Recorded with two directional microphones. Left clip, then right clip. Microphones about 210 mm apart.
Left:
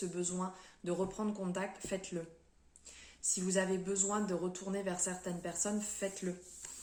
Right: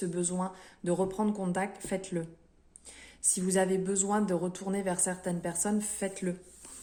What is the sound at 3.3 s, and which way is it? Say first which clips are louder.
A woman's voice: right 6 dB; 55° right (ahead or behind).